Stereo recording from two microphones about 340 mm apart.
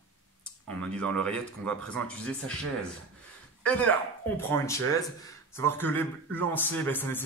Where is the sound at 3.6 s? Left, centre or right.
Centre.